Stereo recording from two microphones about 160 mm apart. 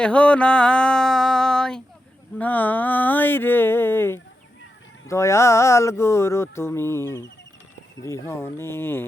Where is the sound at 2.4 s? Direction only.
10° left (ahead or behind).